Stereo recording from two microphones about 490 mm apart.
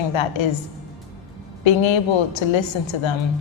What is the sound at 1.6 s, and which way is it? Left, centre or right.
A woman's voice, left.